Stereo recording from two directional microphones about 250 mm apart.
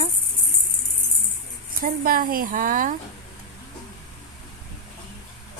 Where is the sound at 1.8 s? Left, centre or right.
Right.